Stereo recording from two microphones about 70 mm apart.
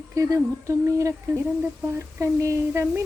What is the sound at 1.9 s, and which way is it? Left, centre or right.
Speech, right.